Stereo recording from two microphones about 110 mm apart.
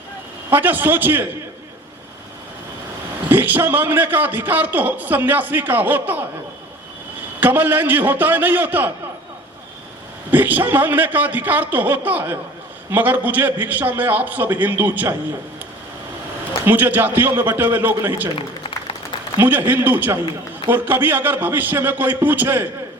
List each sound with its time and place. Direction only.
0.5 s a man's voice: 15° right (ahead or behind)
3.2 s a man's voice: 15° right (ahead or behind)
7.3 s a man's voice: 15° right (ahead or behind)
10.3 s a man's voice: 15° right (ahead or behind)
16.6 s a man's voice: 20° right (ahead or behind)
19.4 s a man's voice: 20° right (ahead or behind)